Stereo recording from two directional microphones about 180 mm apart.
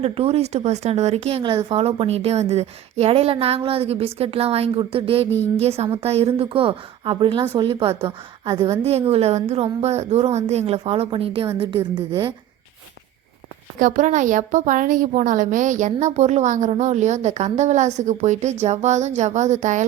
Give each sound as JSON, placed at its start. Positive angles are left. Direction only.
{"t": 0.0, "sound": "a woman's voice", "side_deg": -35}
{"t": 13.7, "sound": "a woman's voice", "side_deg": -45}